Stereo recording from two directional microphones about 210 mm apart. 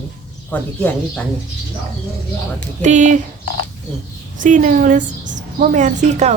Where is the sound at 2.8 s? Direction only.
35° right (ahead or behind).